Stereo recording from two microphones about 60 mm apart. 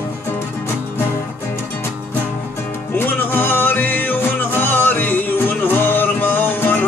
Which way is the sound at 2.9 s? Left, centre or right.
Left.